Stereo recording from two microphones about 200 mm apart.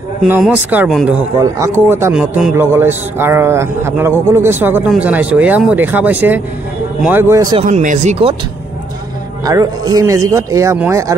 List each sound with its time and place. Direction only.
0.2 s speech: 5° right (ahead or behind)
1.4 s a man's voice: 15° right (ahead or behind)
7.6 s speech: 40° right (ahead or behind)
9.4 s a man's voice: 20° right (ahead or behind)